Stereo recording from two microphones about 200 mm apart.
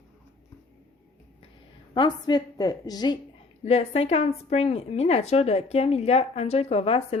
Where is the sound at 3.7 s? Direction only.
30° left (ahead or behind).